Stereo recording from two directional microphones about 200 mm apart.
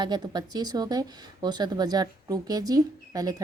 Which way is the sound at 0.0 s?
20° right (ahead or behind).